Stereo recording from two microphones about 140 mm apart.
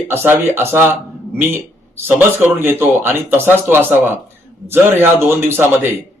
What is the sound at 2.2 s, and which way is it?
Speech, 15° right (ahead or behind).